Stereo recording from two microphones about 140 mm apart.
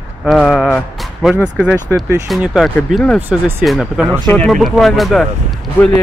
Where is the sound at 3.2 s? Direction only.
15° right (ahead or behind).